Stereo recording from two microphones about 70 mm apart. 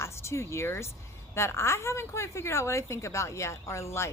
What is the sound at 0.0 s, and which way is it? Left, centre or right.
A woman's voice, left.